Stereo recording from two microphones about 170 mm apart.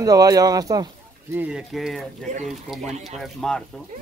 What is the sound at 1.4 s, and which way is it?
Speech, 5° right (ahead or behind).